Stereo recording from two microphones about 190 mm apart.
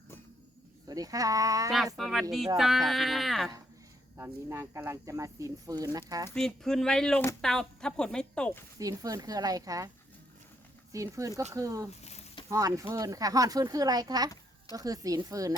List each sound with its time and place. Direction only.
0.9 s speech: 20° right (ahead or behind)
2.0 s speech: centre (ahead or behind)
4.2 s speech: 15° right (ahead or behind)
6.3 s speech: 5° left (ahead or behind)
8.8 s speech: 20° right (ahead or behind)
10.9 s speech: 15° right (ahead or behind)